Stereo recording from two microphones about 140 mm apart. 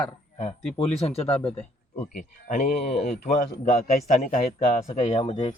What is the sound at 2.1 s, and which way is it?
Speech, 75° left (ahead or behind).